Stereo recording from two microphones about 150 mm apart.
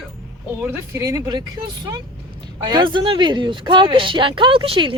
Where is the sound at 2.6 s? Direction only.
30° right (ahead or behind).